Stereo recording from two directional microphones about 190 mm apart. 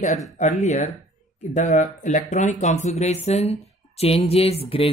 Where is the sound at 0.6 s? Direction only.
35° left (ahead or behind).